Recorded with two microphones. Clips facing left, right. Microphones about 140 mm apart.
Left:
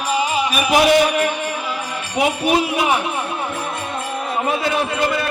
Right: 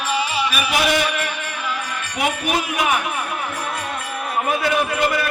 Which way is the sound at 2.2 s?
30° left (ahead or behind).